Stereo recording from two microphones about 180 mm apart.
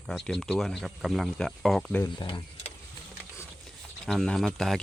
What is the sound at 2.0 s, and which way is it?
Speech, 25° left (ahead or behind).